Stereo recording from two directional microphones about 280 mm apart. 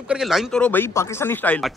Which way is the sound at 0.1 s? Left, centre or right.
Centre.